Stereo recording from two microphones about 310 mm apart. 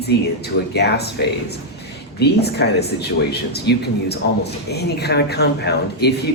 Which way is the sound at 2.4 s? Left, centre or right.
Left.